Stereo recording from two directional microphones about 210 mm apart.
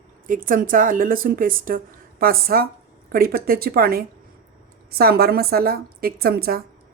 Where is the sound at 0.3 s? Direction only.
40° right (ahead or behind).